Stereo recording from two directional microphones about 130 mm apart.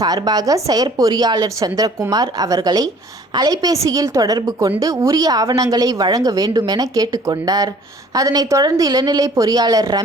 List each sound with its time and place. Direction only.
0.0 s speech: 30° right (ahead or behind)